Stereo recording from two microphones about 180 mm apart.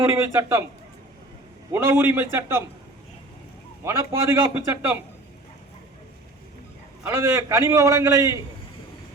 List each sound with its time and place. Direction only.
0.1 s a man's voice: 15° right (ahead or behind)
1.7 s a man's voice: 15° right (ahead or behind)
3.8 s a man's voice: 15° right (ahead or behind)
7.0 s a man's voice: 15° right (ahead or behind)